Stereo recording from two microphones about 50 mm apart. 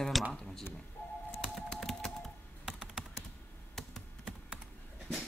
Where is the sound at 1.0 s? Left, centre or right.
Left.